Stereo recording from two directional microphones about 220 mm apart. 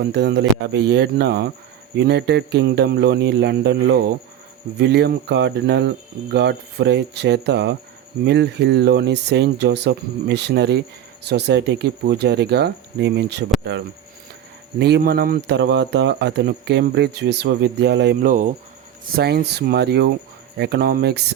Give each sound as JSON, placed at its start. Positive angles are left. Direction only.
{"t": 0.0, "sound": "speech", "side_deg": -50}
{"t": 14.8, "sound": "speech", "side_deg": -50}